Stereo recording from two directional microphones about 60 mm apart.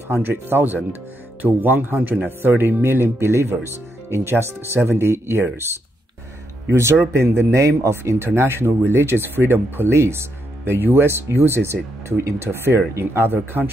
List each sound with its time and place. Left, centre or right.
0.1 s speech: right